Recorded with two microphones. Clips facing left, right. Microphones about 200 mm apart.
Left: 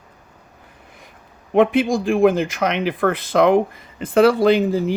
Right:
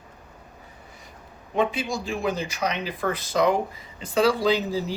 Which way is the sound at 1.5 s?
55° left (ahead or behind).